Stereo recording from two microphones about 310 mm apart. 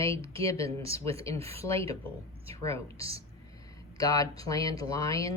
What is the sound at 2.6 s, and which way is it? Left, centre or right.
Speech, centre.